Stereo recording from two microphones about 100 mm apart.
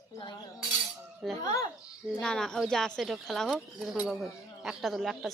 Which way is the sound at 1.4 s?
35° left (ahead or behind).